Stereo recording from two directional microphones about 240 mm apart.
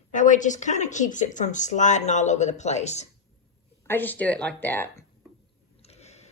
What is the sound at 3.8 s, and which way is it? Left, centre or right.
Speech, centre.